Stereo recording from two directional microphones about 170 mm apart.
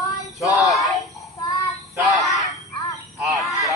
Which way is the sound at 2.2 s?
Centre (ahead or behind).